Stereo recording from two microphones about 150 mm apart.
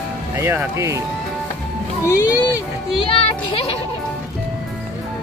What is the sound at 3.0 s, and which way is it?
Music, 40° left (ahead or behind).